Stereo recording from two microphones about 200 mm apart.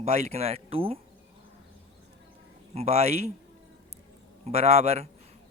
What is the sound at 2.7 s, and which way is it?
Speech, 30° right (ahead or behind).